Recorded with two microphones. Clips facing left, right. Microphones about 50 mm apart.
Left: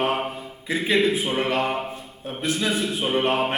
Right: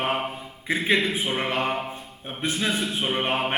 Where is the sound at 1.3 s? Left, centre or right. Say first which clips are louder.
Left 3 dB; right.